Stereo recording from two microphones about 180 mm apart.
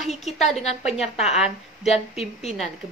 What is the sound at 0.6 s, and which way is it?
Speech, 35° left (ahead or behind).